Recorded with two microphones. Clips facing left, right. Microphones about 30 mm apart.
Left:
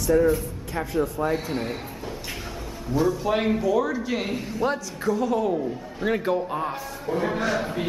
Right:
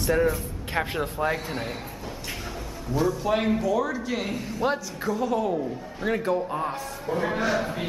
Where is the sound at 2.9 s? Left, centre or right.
Centre.